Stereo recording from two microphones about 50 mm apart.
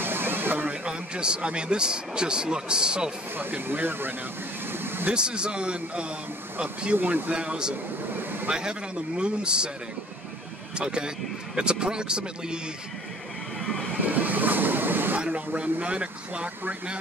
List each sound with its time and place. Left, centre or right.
0.0 s a sound: right
0.8 s a man's voice: centre
3.3 s speech: right
5.1 s a man's voice: centre
7.0 s speech: right
7.3 s a man's voice: centre
8.2 s vehicle: right
8.5 s a man's voice: centre
10.8 s a man's voice: centre
13.9 s waves: right
15.1 s speech: right